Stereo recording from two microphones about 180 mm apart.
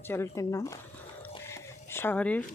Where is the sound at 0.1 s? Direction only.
15° left (ahead or behind).